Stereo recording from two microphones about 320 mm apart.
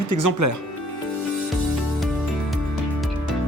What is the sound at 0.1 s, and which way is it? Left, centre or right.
Speech, right.